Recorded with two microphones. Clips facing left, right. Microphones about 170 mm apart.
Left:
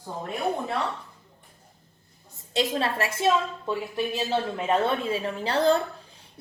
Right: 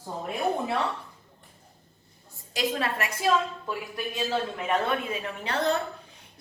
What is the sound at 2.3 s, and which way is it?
A woman's voice, 25° left (ahead or behind).